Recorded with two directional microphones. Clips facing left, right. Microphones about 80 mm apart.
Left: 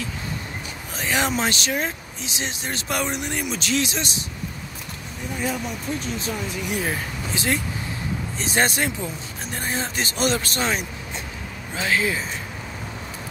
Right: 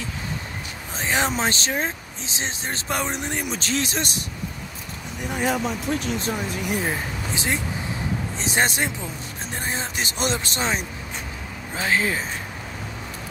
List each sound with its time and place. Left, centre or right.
0.9 s speech: right
5.3 s speech: right
6.9 s speech: centre; by 12.3 s right